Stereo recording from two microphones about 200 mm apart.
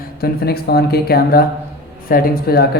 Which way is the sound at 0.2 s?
50° left (ahead or behind).